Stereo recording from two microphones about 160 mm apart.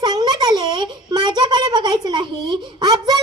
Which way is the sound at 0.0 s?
25° right (ahead or behind).